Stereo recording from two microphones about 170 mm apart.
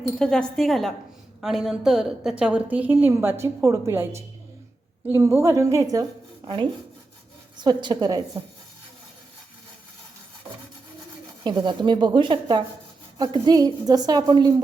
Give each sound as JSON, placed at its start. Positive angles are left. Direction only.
{"t": 0.2, "sound": "a woman's voice", "side_deg": 5}
{"t": 11.4, "sound": "a woman's voice", "side_deg": -25}